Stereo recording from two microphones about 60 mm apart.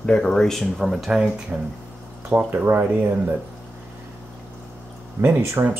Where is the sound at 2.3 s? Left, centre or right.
Right.